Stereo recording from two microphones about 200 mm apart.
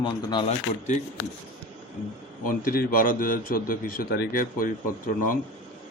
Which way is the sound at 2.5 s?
45° left (ahead or behind).